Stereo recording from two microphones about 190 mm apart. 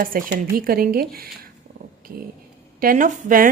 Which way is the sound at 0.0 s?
45° right (ahead or behind).